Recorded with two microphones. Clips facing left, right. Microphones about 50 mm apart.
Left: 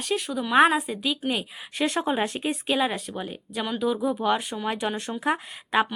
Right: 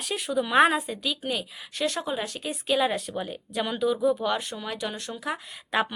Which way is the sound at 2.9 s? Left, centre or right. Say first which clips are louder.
Right 1 dB; centre.